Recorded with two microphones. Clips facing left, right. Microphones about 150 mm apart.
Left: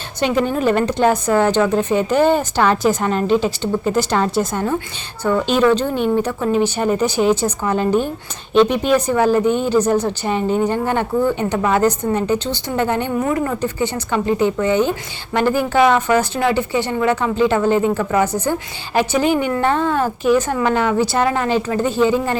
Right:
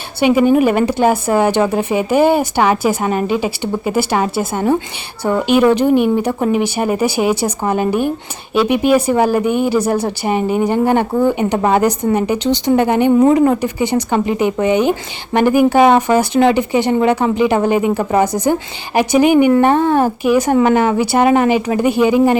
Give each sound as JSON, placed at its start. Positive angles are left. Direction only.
{"t": 0.2, "sound": "speech", "side_deg": -10}
{"t": 11.5, "sound": "a woman's voice", "side_deg": -30}
{"t": 11.8, "sound": "speech", "side_deg": -10}